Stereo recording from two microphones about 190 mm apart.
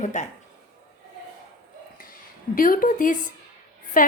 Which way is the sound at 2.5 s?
45° left (ahead or behind).